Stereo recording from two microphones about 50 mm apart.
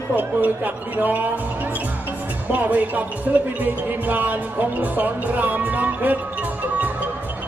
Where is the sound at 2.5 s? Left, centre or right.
Right.